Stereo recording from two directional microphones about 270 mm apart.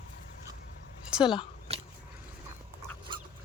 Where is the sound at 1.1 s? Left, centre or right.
Centre.